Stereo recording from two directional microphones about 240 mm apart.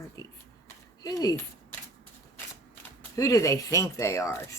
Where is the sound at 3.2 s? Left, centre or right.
Centre.